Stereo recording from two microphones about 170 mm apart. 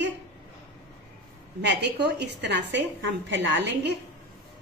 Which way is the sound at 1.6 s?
80° right.